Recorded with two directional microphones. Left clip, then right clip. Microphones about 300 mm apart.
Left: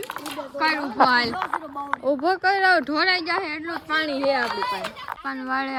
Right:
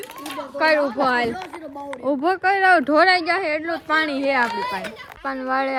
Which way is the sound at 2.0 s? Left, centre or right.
Right.